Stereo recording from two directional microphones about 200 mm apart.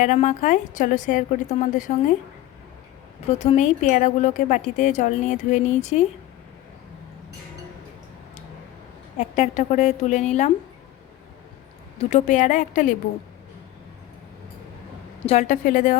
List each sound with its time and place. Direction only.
0.0 s a woman's voice: 35° left (ahead or behind)
3.2 s a woman's voice: 35° left (ahead or behind)
9.1 s a woman's voice: 35° left (ahead or behind)
11.9 s a woman's voice: 35° left (ahead or behind)
15.3 s a woman's voice: 35° left (ahead or behind)